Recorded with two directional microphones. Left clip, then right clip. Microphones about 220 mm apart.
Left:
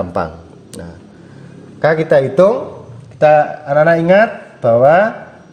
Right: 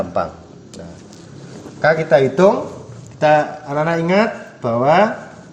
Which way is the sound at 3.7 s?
40° left (ahead or behind).